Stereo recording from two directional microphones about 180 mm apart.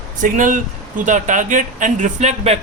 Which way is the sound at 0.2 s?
45° right (ahead or behind).